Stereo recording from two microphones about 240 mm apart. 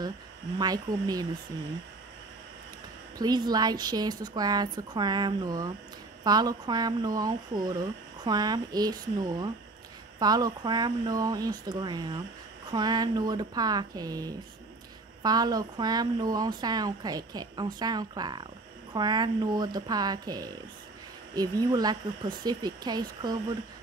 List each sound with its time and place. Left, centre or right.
0.6 s a woman's voice: centre
3.2 s a woman's voice: centre